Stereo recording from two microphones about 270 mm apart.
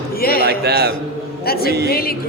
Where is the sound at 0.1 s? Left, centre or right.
Left.